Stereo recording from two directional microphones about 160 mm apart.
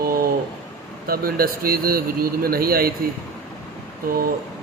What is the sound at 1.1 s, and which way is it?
Speech, 65° right (ahead or behind).